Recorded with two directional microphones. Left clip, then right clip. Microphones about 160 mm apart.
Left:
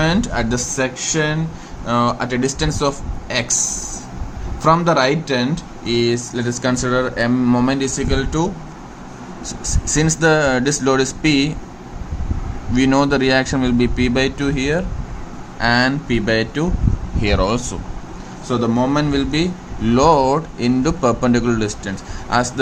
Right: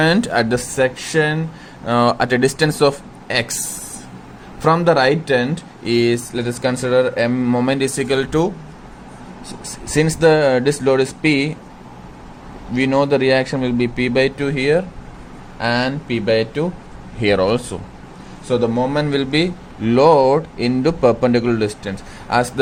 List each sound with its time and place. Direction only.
0.0 s speech: 50° right (ahead or behind)
4.6 s speech: 35° right (ahead or behind)
6.3 s a man's voice: 25° right (ahead or behind); by 8.4 s 45° right (ahead or behind)
9.9 s a man's voice: 20° right (ahead or behind)
12.7 s speech: 10° right (ahead or behind)
17.2 s a man's voice: 25° right (ahead or behind)